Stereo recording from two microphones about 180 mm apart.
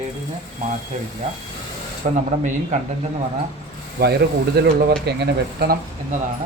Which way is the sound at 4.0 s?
65° right (ahead or behind).